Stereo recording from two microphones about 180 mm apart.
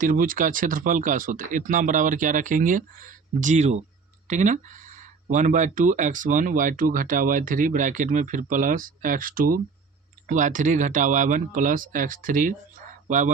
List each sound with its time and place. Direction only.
0.0 s speech: 50° right (ahead or behind)